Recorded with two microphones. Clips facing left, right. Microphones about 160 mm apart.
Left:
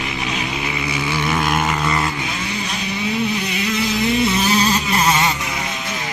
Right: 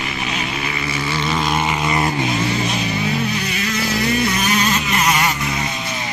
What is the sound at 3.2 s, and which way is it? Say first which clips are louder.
Vehicle: left 1 dB; 20° left (ahead or behind).